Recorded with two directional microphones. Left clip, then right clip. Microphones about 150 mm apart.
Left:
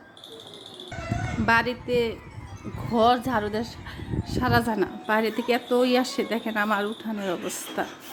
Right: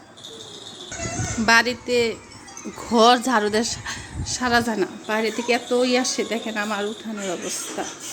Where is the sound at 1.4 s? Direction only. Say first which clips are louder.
Right 5 dB; centre (ahead or behind).